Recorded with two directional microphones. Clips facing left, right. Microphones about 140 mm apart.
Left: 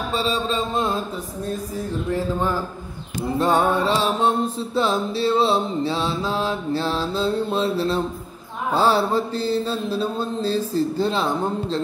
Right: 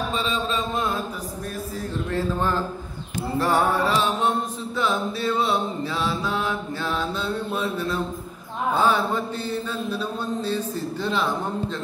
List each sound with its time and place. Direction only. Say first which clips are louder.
0.1 s mantra: left 3 dB; 35° left (ahead or behind)
2.0 s a sound: left 1 dB; 15° left (ahead or behind)
3.3 s mantra: left 2 dB; 20° left (ahead or behind)